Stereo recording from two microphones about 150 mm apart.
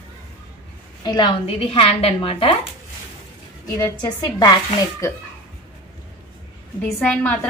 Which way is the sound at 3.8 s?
25° left (ahead or behind).